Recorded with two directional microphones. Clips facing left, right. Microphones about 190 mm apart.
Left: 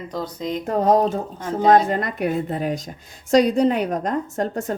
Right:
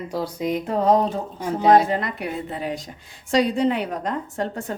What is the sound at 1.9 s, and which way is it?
A woman's voice, 45° left (ahead or behind).